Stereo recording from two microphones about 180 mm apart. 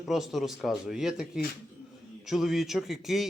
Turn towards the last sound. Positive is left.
turn(degrees=0)  # may be behind; listen again after turning